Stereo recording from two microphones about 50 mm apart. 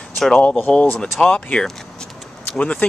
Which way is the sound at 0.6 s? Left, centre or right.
Left.